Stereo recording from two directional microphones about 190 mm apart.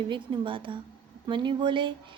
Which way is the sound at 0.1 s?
25° right (ahead or behind).